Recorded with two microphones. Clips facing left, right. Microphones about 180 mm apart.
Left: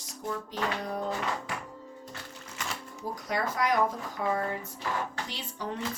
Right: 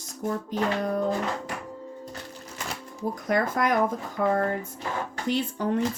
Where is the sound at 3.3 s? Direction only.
50° right (ahead or behind).